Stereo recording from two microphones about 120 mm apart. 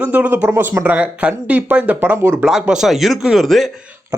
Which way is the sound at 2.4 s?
5° right (ahead or behind).